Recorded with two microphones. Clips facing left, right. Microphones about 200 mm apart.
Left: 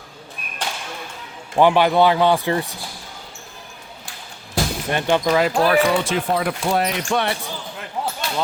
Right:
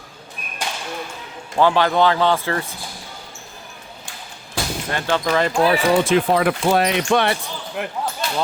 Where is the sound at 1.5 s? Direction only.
15° left (ahead or behind).